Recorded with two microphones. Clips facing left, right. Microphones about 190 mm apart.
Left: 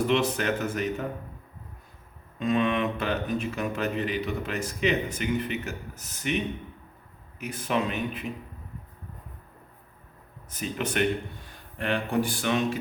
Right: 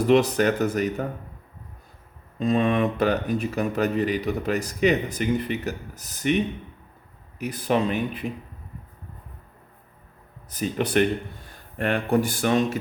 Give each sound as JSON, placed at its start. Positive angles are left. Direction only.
{"t": 0.1, "sound": "speech", "side_deg": -40}
{"t": 2.4, "sound": "speech", "side_deg": -40}
{"t": 7.3, "sound": "speech", "side_deg": -35}
{"t": 10.5, "sound": "speech", "side_deg": -35}